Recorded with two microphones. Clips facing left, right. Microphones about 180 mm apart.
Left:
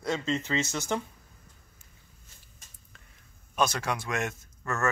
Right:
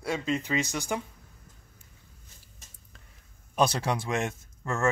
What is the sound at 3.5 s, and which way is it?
Speech, 30° right (ahead or behind).